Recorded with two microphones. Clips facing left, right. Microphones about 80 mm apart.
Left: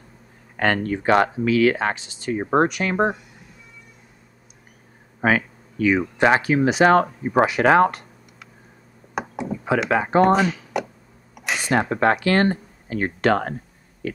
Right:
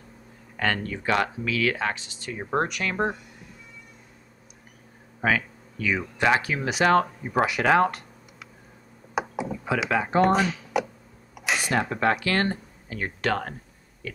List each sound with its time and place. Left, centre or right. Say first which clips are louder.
0.6 s speech: left 6 dB; left
5.2 s speech: left 4 dB; left
9.1 s a sound: left 1 dB; centre
9.8 s speech: left 4 dB; left
10.2 s speech: left 4 dB; centre
11.3 s a sound: even; centre
11.7 s speech: left 6 dB; left